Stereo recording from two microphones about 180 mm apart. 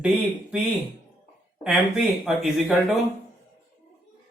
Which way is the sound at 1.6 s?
5° right (ahead or behind).